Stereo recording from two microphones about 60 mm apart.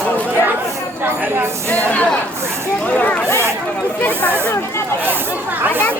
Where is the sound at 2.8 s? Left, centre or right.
Left.